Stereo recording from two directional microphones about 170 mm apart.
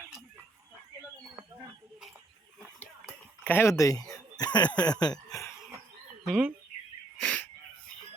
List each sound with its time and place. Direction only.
3.4 s speech: 15° left (ahead or behind)
4.4 s a sound: 25° left (ahead or behind)
6.2 s speech: 5° right (ahead or behind)
7.2 s wheeze: 5° left (ahead or behind)